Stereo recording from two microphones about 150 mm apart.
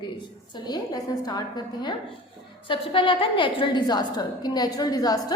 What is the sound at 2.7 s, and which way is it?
A woman's voice, 35° left (ahead or behind).